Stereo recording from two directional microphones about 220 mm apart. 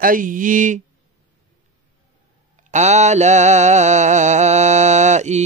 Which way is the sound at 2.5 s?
35° right (ahead or behind).